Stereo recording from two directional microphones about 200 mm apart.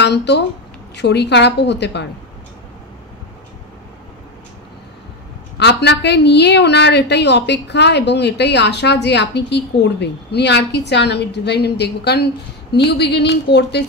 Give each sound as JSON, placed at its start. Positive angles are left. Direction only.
{"t": 0.0, "sound": "a woman's voice", "side_deg": 55}
{"t": 5.6, "sound": "a woman's voice", "side_deg": 60}